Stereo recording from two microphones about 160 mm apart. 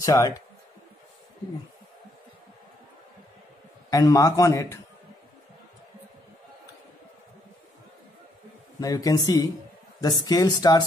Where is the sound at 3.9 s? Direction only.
20° left (ahead or behind).